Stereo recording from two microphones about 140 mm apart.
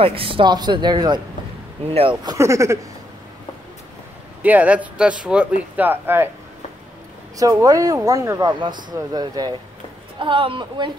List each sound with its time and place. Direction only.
0.0 s speech: 40° right (ahead or behind)
2.2 s speech: 20° right (ahead or behind)
4.4 s speech: 10° right (ahead or behind)
7.3 s speech: 25° right (ahead or behind)